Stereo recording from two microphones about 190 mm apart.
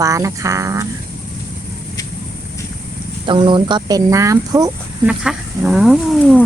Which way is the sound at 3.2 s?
25° right (ahead or behind).